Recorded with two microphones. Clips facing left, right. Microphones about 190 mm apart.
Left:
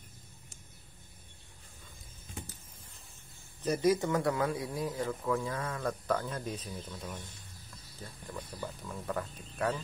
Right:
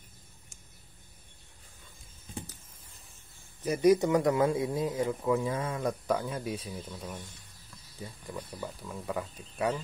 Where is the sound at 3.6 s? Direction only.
15° right (ahead or behind).